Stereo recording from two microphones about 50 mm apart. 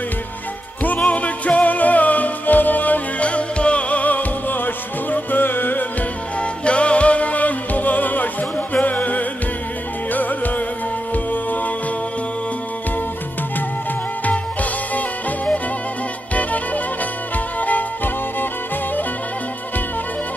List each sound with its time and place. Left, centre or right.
0.8 s music: left
6.4 s music: left
14.2 s music: left